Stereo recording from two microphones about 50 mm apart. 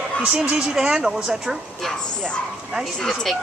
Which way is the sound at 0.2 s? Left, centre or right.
Centre.